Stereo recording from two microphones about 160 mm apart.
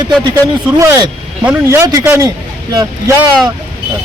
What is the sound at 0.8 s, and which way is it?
A man's voice, 20° right (ahead or behind).